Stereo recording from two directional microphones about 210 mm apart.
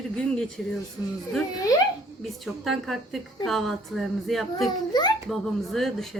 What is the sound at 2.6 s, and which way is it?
A woman's voice, centre (ahead or behind).